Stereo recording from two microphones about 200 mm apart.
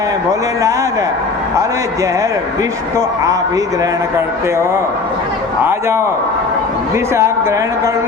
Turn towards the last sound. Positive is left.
turn(degrees=-15)  # may be behind; listen again after turning